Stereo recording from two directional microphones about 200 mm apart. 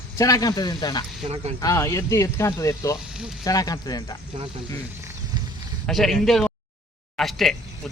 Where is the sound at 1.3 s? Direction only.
35° right (ahead or behind).